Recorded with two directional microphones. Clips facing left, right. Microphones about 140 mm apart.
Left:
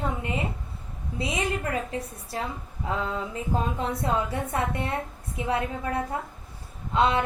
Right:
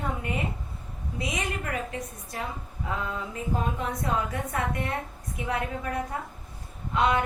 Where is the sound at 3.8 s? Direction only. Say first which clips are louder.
Left 2 dB; 30° left (ahead or behind).